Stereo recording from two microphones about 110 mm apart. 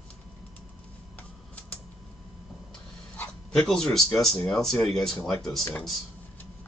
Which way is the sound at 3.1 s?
10° left (ahead or behind).